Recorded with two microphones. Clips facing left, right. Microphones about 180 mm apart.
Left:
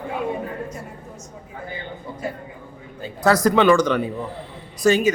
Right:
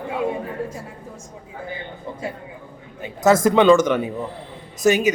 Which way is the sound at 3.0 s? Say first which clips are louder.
Right 2 dB; 20° right (ahead or behind).